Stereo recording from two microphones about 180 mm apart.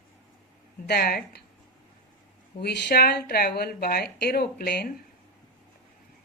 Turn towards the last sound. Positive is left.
turn(degrees=60)  # may be behind; listen again after turning